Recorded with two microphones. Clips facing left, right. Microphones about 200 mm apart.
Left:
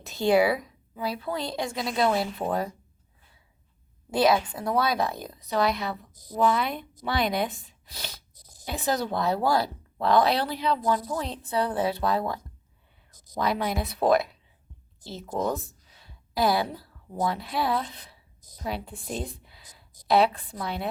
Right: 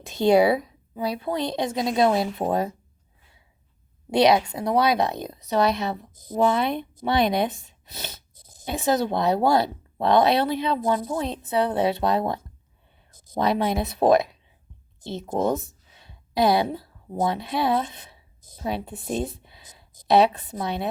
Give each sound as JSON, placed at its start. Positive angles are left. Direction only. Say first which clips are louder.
{"t": 0.2, "sound": "a woman's voice", "louder": "right 4 dB", "side_deg": -25}
{"t": 4.4, "sound": "a woman's voice", "louder": "right 4 dB", "side_deg": -20}
{"t": 15.0, "sound": "a sound", "louder": "right 5 dB", "side_deg": -25}
{"t": 20.5, "sound": "a woman's voice", "louder": "right 4 dB", "side_deg": -20}